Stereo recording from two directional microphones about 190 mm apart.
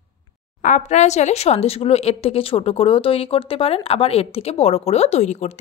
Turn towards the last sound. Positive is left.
turn(degrees=35)  # may be behind; listen again after turning